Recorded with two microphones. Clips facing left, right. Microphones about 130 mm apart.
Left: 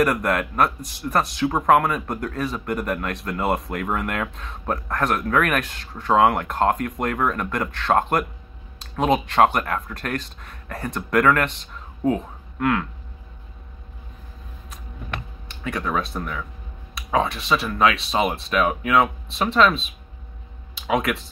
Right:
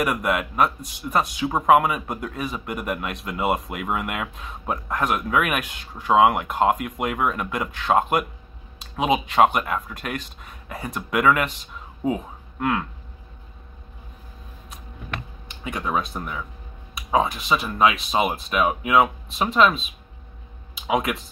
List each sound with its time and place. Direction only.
0.0 s speech: 10° right (ahead or behind)
15.6 s speech: 15° right (ahead or behind)
17.5 s speech: 10° right (ahead or behind)